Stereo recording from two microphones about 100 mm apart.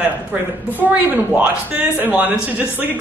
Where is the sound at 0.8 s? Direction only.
15° right (ahead or behind).